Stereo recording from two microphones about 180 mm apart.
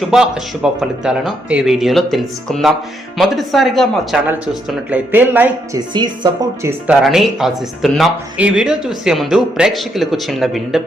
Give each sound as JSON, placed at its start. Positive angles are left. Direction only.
{"t": 0.1, "sound": "speech", "side_deg": -5}
{"t": 5.9, "sound": "speech", "side_deg": -20}
{"t": 7.0, "sound": "speech", "side_deg": 0}